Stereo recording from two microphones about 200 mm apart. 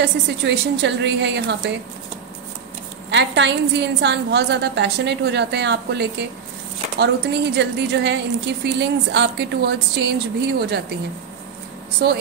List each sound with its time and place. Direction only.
0.0 s a woman's voice: 60° right (ahead or behind)
3.1 s a woman's voice: 65° right (ahead or behind)
12.0 s a woman's voice: 60° right (ahead or behind)